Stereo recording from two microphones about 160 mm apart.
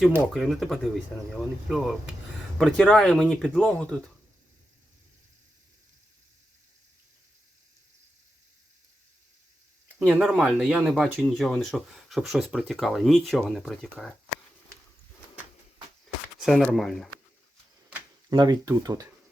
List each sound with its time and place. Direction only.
0.3 s speech: centre (ahead or behind)
10.0 s speech: 5° right (ahead or behind)
16.4 s speech: centre (ahead or behind)
18.3 s speech: 25° right (ahead or behind)